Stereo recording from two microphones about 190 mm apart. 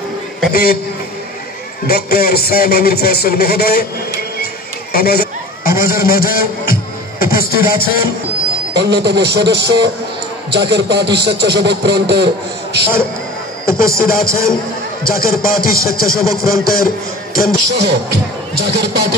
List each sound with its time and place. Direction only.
0.5 s a man's voice: 50° left (ahead or behind)
1.9 s a man's voice: 55° left (ahead or behind)
4.9 s a sound: 55° left (ahead or behind)
5.8 s speech: 50° left (ahead or behind)
8.7 s speech: 60° right (ahead or behind)
13.7 s a man's voice: 50° left (ahead or behind)
18.7 s speech: 60° right (ahead or behind)